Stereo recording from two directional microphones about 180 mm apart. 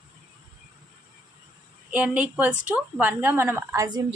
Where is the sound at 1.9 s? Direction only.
10° right (ahead or behind).